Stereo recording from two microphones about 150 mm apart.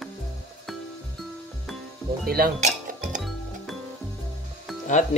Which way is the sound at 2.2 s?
85° right.